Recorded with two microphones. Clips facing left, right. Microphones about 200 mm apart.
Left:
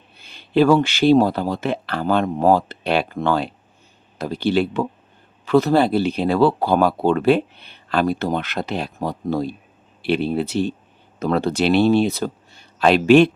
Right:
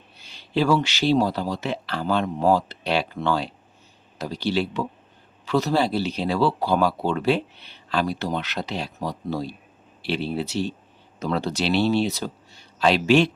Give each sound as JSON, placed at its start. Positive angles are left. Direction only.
{"t": 0.2, "sound": "speech", "side_deg": 55}